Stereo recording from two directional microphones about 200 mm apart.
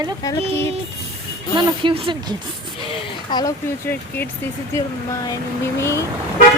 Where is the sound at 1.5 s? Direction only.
25° right (ahead or behind).